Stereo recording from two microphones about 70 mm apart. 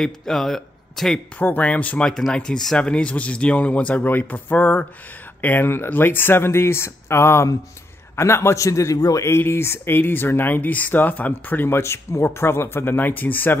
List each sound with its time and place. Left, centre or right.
0.0 s a man's voice: centre
1.4 s speech: left
2.0 s a man's voice: centre; by 9.2 s left
9.2 s speech: left